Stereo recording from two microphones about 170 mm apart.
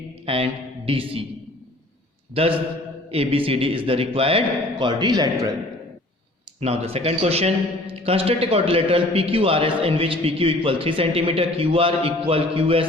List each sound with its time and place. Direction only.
0.3 s a man's voice: 35° right (ahead or behind)
2.3 s a man's voice: 35° right (ahead or behind)
6.6 s a man's voice: 35° right (ahead or behind)